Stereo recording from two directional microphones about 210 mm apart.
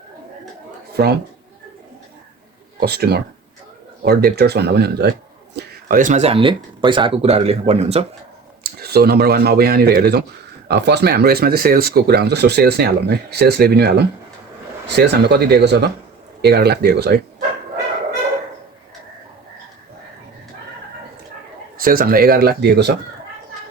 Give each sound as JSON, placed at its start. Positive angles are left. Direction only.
{"t": 2.8, "sound": "speech", "side_deg": -50}
{"t": 5.5, "sound": "speech", "side_deg": -40}
{"t": 8.6, "sound": "speech", "side_deg": -50}
{"t": 21.8, "sound": "speech", "side_deg": -45}